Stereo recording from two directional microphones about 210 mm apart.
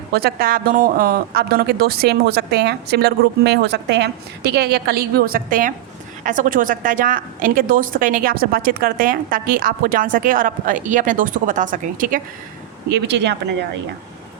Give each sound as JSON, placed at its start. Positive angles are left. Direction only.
{"t": 0.1, "sound": "a woman's voice", "side_deg": -50}
{"t": 12.9, "sound": "speech", "side_deg": -55}